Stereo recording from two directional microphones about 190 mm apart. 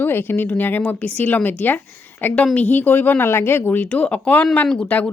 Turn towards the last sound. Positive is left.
turn(degrees=5)  # may be behind; listen again after turning